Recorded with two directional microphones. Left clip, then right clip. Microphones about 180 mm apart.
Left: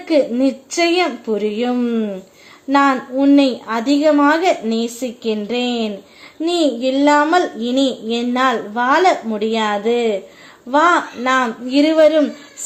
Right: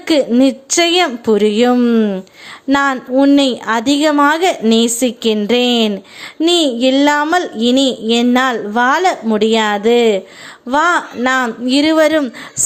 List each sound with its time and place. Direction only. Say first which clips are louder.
0.0 s speech: right 3 dB; 30° right (ahead or behind)